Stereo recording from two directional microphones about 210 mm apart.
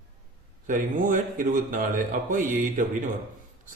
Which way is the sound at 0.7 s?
40° right (ahead or behind).